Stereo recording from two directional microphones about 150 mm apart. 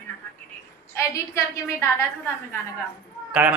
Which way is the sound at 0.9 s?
20° left (ahead or behind).